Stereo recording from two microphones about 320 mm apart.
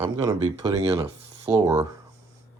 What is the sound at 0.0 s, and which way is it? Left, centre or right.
Speech, centre.